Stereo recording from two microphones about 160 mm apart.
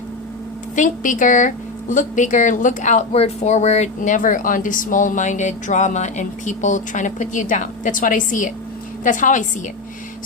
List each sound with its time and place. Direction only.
0.8 s a woman's voice: 55° left (ahead or behind)